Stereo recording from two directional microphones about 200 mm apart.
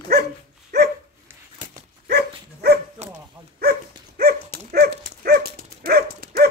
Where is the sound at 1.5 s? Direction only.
50° right (ahead or behind).